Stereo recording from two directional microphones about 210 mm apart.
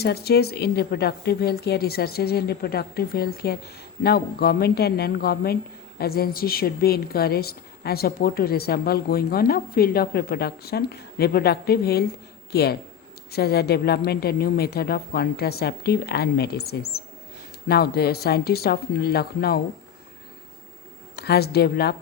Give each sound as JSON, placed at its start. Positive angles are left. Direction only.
{"t": 0.0, "sound": "a woman's voice", "side_deg": 50}
{"t": 21.2, "sound": "a woman's voice", "side_deg": 50}